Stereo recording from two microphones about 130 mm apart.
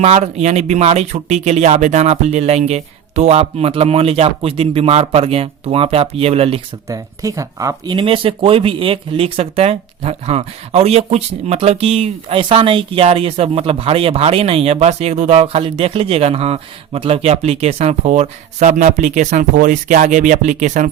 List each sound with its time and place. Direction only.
0.0 s speech: 55° right (ahead or behind)
6.8 s speech: 25° right (ahead or behind)
7.9 s speech: 45° right (ahead or behind); by 20.9 s 70° right (ahead or behind)